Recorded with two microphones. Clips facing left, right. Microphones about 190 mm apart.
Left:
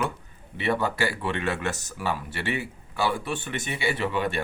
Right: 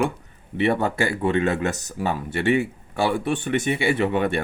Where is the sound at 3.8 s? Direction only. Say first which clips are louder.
Right 6 dB; 55° right (ahead or behind).